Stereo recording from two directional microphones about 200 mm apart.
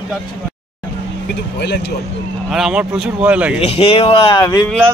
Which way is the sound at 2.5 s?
5° right (ahead or behind).